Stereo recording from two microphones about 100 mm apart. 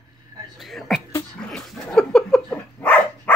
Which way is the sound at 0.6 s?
Centre (ahead or behind).